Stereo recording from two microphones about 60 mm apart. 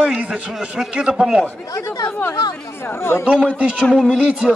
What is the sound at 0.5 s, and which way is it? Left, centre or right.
Speech, centre.